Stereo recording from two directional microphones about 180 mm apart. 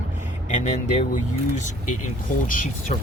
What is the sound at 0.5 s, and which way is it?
Speech, 40° left (ahead or behind).